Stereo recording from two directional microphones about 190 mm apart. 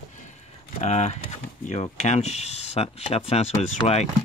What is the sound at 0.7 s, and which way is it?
Speech, 35° left (ahead or behind).